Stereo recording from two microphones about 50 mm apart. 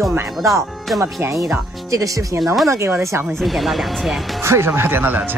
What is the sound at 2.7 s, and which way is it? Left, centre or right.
Speech, right.